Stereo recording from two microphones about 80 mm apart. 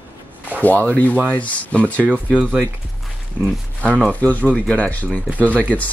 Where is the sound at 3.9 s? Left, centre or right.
Centre.